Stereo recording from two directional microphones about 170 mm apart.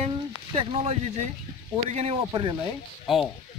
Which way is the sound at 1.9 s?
35° right (ahead or behind).